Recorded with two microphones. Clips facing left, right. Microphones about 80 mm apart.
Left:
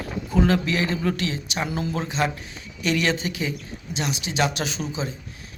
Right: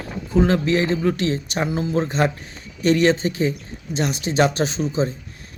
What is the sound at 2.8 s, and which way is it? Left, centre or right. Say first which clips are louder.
A man's voice: right 7 dB; right.